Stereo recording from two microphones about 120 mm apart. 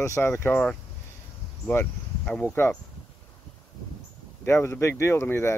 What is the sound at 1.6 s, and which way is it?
Speech, 15° left (ahead or behind).